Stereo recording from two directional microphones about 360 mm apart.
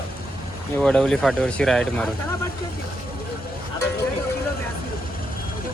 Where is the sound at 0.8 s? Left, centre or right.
Centre.